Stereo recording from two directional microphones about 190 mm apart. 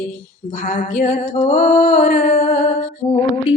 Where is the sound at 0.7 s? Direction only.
40° left (ahead or behind).